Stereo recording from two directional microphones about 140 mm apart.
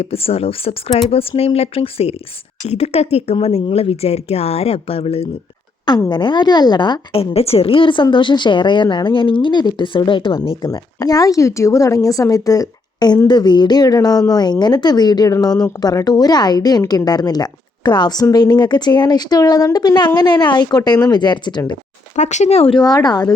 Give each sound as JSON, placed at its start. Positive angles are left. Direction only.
{"t": 0.0, "sound": "speech", "side_deg": 45}
{"t": 6.1, "sound": "a woman's voice", "side_deg": 35}
{"t": 10.7, "sound": "a woman's voice", "side_deg": 25}
{"t": 22.1, "sound": "speech", "side_deg": 55}
{"t": 22.8, "sound": "a woman's voice", "side_deg": 30}